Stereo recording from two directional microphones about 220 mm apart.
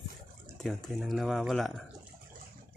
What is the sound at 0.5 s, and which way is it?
Speech, centre (ahead or behind).